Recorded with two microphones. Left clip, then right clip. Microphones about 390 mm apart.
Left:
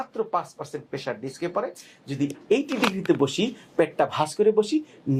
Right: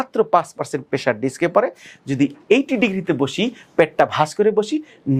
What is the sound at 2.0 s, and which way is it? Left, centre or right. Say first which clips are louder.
Speech: right 7 dB; right.